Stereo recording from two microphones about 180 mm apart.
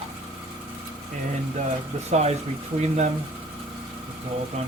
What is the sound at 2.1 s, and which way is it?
Speech, 35° right (ahead or behind).